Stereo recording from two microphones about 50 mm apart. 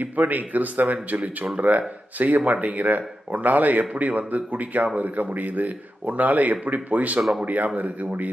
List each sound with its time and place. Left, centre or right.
0.0 s speech: right